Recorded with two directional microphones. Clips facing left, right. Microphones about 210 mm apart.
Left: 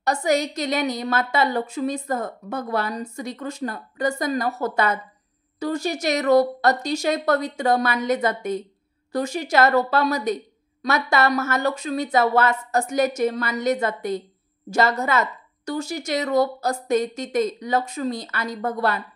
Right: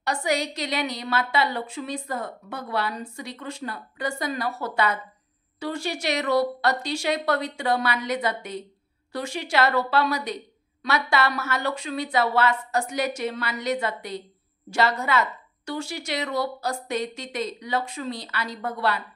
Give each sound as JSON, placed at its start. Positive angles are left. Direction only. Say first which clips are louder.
{"t": 0.0, "sound": "a woman's voice", "louder": "left 4 dB", "side_deg": 45}